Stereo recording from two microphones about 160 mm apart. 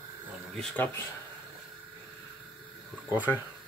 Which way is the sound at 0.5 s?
10° left (ahead or behind).